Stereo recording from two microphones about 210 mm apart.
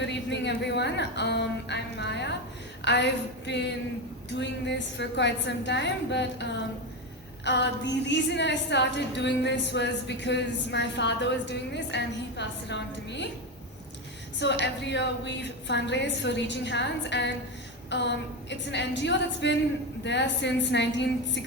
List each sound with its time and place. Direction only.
0.0 s a sound: 55° left (ahead or behind)
2.8 s a woman's voice: 55° left (ahead or behind)
14.6 s a woman's voice: 55° left (ahead or behind)